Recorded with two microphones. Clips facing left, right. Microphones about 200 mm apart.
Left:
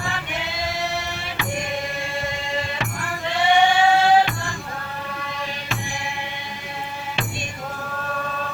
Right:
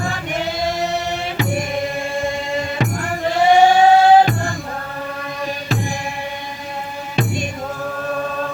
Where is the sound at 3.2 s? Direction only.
40° right (ahead or behind).